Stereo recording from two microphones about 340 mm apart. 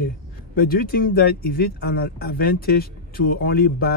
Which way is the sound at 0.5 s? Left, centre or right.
Left.